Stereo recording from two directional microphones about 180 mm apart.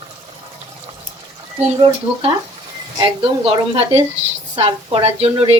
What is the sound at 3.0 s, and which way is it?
A woman's voice, 30° right (ahead or behind).